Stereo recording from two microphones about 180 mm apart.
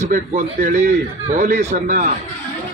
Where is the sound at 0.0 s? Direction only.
45° right (ahead or behind).